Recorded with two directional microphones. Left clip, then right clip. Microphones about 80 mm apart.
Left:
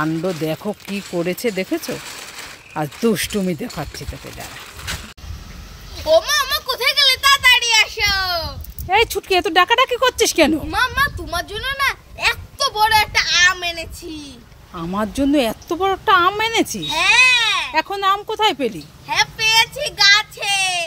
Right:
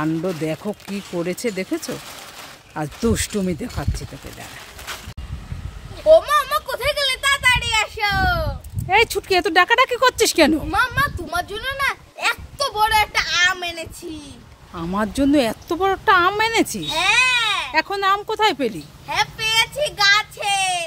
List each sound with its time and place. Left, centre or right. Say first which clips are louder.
0.0 s speech: left 2 dB; centre
6.0 s a sound: right 2 dB; right
8.8 s speech: even; centre
10.7 s a child's voice: left 1 dB; right
14.7 s speech: even; centre
17.0 s baby cry: left 4 dB; right
17.7 s speech: left 1 dB; centre
19.0 s child singing: left 4 dB; right